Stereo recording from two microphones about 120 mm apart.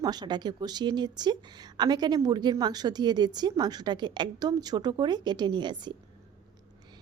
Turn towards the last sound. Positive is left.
turn(degrees=-40)  # may be behind; listen again after turning